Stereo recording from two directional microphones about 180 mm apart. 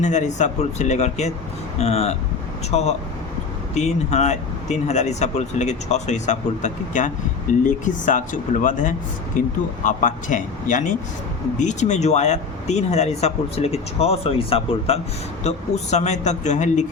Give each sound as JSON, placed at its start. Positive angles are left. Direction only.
{"t": 0.0, "sound": "speech", "side_deg": 40}